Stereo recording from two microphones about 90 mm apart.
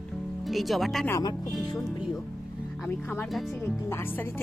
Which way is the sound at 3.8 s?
30° left (ahead or behind).